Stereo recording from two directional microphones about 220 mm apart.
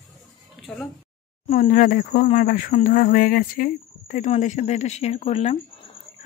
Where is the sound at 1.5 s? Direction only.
35° left (ahead or behind).